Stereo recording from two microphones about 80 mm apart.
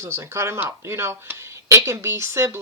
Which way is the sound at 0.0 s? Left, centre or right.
Right.